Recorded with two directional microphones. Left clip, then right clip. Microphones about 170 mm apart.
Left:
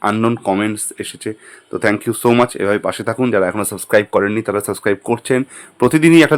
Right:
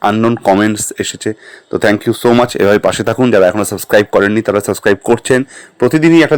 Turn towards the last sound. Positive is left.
turn(degrees=-5)  # may be behind; listen again after turning